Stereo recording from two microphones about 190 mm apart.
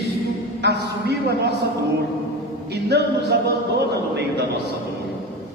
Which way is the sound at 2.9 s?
60° right (ahead or behind).